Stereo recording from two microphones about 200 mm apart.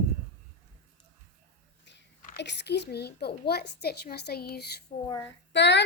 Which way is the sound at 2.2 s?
55° left (ahead or behind).